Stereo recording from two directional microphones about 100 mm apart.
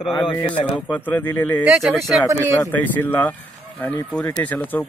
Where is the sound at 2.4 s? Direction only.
20° left (ahead or behind).